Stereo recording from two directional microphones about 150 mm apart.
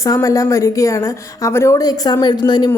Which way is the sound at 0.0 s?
20° left (ahead or behind).